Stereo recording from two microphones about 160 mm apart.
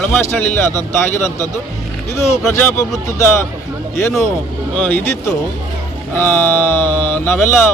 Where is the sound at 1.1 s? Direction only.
15° left (ahead or behind).